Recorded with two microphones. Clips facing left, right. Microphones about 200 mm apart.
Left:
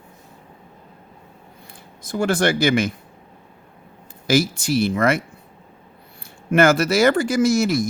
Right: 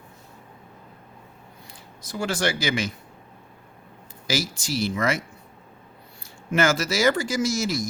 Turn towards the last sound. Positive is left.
turn(degrees=60)  # may be behind; listen again after turning